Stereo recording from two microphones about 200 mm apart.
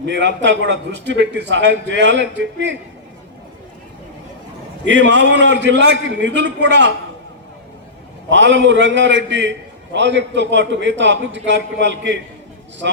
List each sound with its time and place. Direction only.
0.0 s a man's voice: 60° right (ahead or behind)
4.9 s a man's voice: 65° right (ahead or behind)
8.3 s a man's voice: 65° right (ahead or behind)